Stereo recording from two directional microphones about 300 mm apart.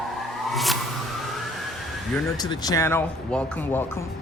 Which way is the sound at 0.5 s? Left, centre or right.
Centre.